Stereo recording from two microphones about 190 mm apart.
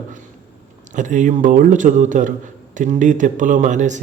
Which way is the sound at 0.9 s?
40° right (ahead or behind).